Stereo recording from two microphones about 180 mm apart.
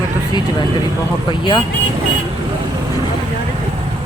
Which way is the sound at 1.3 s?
25° left (ahead or behind).